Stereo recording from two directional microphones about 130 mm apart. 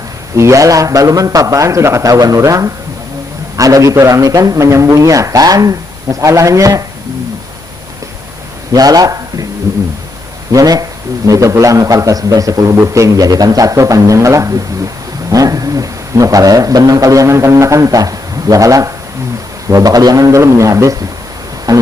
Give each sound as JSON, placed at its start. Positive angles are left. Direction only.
{"t": 0.3, "sound": "a man's voice", "side_deg": -25}
{"t": 8.7, "sound": "a man's voice", "side_deg": -30}
{"t": 15.3, "sound": "a sound", "side_deg": -25}
{"t": 19.6, "sound": "a man's voice", "side_deg": -25}
{"t": 21.7, "sound": "music", "side_deg": -35}